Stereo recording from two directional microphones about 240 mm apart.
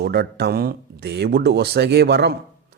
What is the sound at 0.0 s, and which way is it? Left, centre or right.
Speech, right.